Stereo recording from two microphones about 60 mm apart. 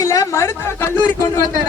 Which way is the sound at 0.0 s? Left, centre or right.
Left.